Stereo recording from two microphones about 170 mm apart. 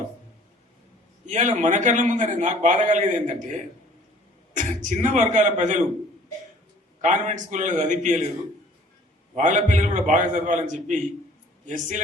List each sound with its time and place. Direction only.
1.2 s a man's voice: 45° right (ahead or behind)
4.5 s a man's voice: 45° right (ahead or behind)
7.0 s a man's voice: 45° right (ahead or behind)
9.3 s a man's voice: 45° right (ahead or behind)